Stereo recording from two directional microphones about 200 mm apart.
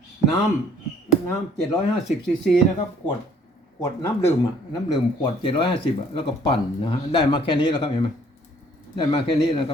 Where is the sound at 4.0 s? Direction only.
20° left (ahead or behind).